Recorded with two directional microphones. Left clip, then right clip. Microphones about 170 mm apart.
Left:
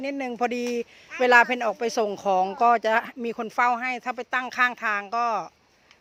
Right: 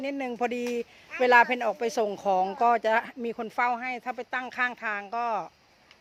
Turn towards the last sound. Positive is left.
turn(degrees=20)  # may be behind; listen again after turning